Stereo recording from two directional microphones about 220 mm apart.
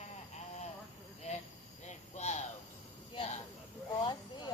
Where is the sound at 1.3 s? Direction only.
30° left (ahead or behind).